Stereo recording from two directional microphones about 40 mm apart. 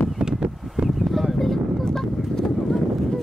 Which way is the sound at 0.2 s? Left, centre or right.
Right.